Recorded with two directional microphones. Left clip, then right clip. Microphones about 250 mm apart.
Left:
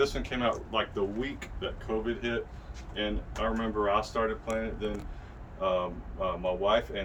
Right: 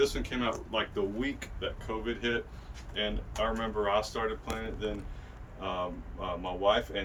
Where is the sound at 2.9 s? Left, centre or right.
Centre.